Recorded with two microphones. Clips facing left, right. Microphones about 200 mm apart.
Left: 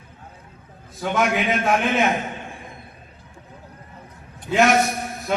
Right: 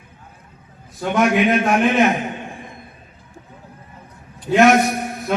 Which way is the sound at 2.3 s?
15° right (ahead or behind).